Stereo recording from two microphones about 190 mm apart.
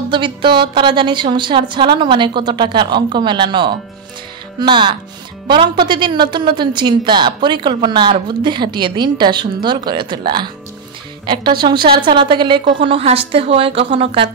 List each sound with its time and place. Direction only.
0.1 s a woman's voice: 25° right (ahead or behind)